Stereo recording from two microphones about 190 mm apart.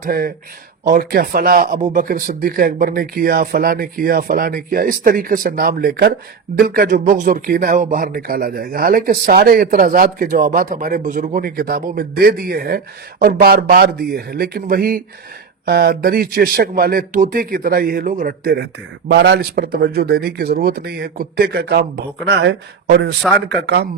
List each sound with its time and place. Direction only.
0.0 s speech: 50° right (ahead or behind)